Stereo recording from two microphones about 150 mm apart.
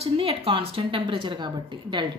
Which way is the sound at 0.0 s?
40° right (ahead or behind).